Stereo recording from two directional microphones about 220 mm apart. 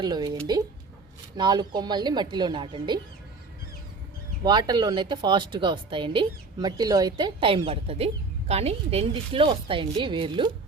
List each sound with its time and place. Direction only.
0.0 s speech: 20° right (ahead or behind)
1.4 s speech: 20° right (ahead or behind)
4.4 s speech: 20° right (ahead or behind)